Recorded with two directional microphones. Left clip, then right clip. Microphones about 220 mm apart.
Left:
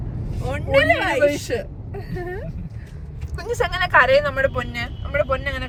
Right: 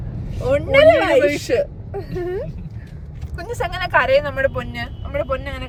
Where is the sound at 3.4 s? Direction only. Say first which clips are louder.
Left 2 dB; 10° right (ahead or behind).